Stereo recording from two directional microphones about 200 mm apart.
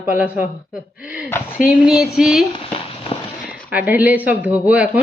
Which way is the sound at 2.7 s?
30° left (ahead or behind).